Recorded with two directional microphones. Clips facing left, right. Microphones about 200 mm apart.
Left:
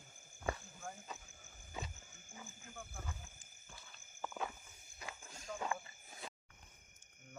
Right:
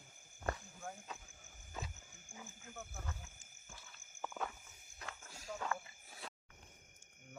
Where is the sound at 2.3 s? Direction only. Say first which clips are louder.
Right 1 dB; 5° right (ahead or behind).